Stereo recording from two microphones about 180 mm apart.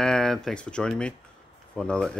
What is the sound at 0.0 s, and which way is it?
Speech, 5° left (ahead or behind).